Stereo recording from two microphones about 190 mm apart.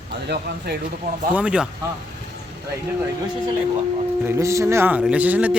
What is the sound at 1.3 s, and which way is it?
Speech, 5° right (ahead or behind).